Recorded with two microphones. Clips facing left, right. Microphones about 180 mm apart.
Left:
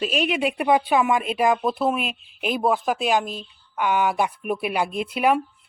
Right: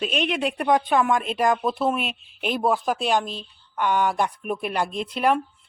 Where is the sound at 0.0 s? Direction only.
5° left (ahead or behind).